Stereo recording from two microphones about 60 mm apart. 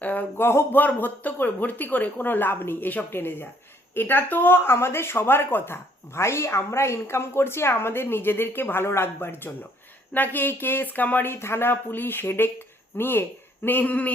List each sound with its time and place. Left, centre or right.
0.0 s speech: left
11.3 s speech: left